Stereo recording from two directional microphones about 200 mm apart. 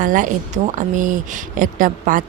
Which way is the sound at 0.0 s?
40° right (ahead or behind).